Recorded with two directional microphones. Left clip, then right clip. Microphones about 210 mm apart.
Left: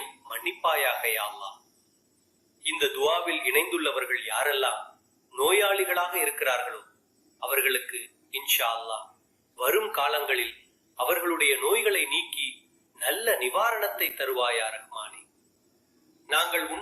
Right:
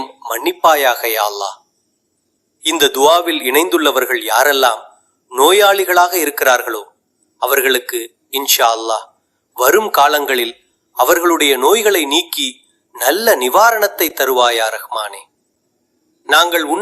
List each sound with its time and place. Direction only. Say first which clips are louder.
0.3 s a man's voice: right 15 dB; 50° right (ahead or behind)
2.6 s a man's voice: right 15 dB; 50° right (ahead or behind)
16.2 s a man's voice: right 14 dB; 50° right (ahead or behind)